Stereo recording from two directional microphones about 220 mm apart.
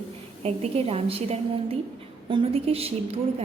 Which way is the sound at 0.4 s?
25° right (ahead or behind).